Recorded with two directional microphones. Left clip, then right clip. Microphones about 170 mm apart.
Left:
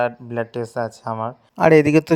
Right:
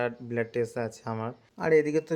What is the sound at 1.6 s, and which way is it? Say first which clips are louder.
Speech: left 10 dB; 55° left (ahead or behind).